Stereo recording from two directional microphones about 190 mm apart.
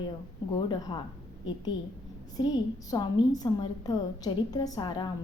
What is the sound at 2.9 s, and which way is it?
A woman's voice, 20° left (ahead or behind).